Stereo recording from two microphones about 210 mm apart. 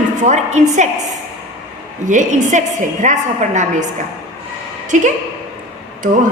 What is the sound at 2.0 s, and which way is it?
A woman's voice, 35° right (ahead or behind).